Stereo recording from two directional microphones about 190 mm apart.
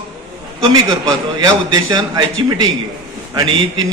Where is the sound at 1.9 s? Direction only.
20° right (ahead or behind).